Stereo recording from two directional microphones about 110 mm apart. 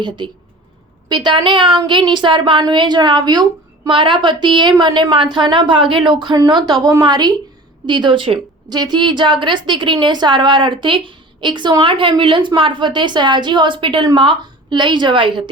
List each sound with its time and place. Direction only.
1.0 s a woman's voice: 40° right (ahead or behind)